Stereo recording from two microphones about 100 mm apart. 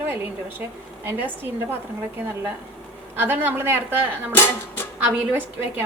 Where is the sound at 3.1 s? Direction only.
20° right (ahead or behind).